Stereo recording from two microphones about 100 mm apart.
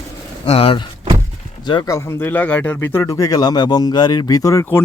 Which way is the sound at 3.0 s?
35° left (ahead or behind).